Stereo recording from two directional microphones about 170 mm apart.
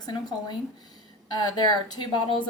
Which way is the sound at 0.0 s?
25° left (ahead or behind).